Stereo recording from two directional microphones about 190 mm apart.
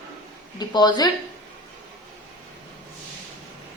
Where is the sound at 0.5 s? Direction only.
20° left (ahead or behind).